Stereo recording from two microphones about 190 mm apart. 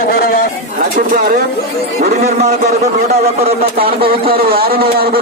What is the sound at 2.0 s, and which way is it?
Speech, 35° right (ahead or behind).